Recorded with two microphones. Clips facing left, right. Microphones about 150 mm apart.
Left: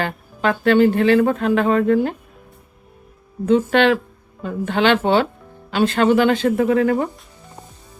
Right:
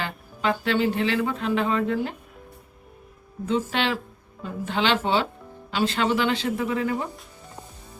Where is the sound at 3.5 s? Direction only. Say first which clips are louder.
Left 10 dB; 55° left (ahead or behind).